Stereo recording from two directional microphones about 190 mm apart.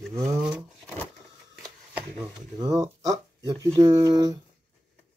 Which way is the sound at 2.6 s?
20° right (ahead or behind).